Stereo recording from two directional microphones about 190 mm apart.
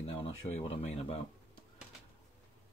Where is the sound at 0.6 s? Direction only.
35° left (ahead or behind).